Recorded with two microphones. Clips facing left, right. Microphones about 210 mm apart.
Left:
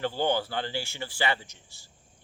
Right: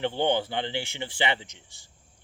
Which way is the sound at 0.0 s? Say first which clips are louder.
Right 2 dB; 20° right (ahead or behind).